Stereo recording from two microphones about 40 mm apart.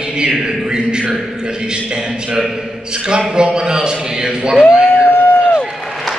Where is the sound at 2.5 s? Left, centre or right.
Centre.